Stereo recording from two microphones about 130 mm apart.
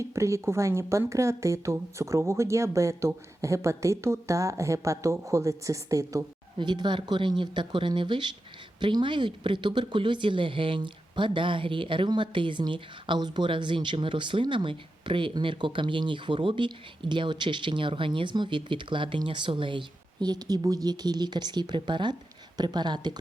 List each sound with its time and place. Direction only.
0.0 s speech: 20° right (ahead or behind)
6.6 s speech: 35° right (ahead or behind)